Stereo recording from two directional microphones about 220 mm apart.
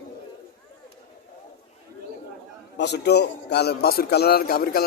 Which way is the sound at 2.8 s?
50° left (ahead or behind).